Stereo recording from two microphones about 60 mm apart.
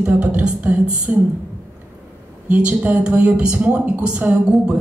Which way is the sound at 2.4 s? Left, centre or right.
Right.